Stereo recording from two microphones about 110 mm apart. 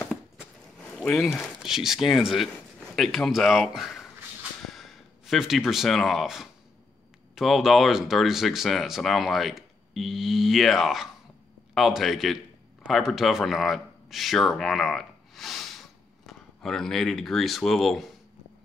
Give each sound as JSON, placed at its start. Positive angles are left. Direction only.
{"t": 1.2, "sound": "speech", "side_deg": 0}